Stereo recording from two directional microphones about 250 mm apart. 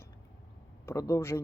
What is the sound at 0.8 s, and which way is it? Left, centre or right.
Speech, centre.